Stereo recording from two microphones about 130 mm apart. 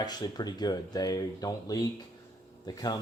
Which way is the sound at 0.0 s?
30° left (ahead or behind).